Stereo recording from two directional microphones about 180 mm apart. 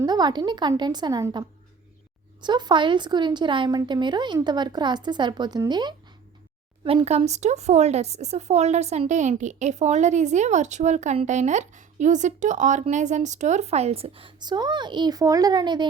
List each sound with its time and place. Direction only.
0.0 s speech: 25° right (ahead or behind)
6.8 s speech: 35° right (ahead or behind)